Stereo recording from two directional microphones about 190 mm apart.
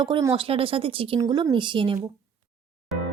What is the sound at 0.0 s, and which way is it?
Speech, 20° right (ahead or behind).